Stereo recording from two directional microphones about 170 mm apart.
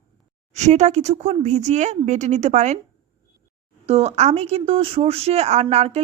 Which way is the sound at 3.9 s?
40° right (ahead or behind).